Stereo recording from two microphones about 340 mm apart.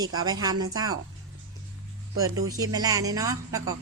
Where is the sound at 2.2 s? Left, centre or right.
Centre.